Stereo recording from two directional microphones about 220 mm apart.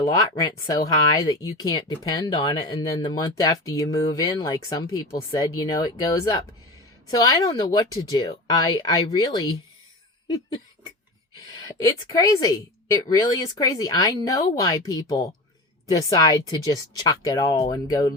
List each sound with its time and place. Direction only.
0.0 s speech: 15° left (ahead or behind)
10.2 s cough: 20° left (ahead or behind)
11.8 s speech: 15° left (ahead or behind)